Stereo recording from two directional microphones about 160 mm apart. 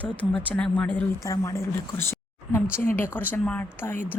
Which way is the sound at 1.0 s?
20° left (ahead or behind).